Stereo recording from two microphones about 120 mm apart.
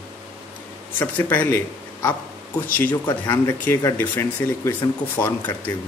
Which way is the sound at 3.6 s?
20° left (ahead or behind).